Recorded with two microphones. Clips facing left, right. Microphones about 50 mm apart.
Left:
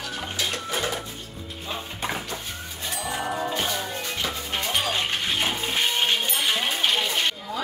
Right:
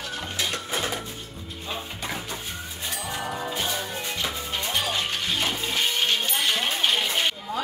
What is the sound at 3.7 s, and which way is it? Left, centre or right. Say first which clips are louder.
Music: left 1 dB; centre.